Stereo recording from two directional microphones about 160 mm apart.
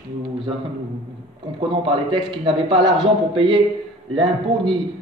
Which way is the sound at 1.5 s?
30° right (ahead or behind).